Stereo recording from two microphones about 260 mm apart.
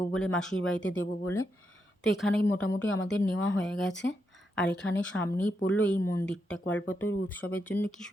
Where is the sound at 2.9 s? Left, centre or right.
Left.